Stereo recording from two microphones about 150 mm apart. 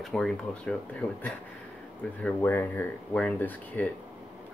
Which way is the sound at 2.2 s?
15° left (ahead or behind).